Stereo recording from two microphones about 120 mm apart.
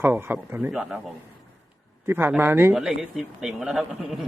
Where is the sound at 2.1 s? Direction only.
20° right (ahead or behind).